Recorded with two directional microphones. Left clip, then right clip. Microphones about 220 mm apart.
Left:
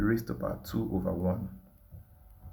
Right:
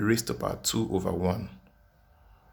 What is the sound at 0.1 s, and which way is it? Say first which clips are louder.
Speech: right 4 dB; 30° right (ahead or behind).